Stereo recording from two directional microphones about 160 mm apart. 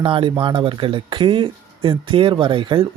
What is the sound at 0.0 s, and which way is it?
Speech, 30° right (ahead or behind).